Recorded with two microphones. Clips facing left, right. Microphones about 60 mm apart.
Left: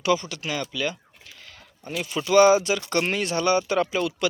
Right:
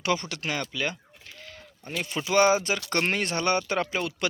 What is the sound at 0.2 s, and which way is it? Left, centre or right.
Speech, right.